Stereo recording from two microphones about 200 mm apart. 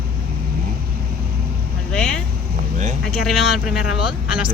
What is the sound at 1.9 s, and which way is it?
Vehicle, 5° left (ahead or behind).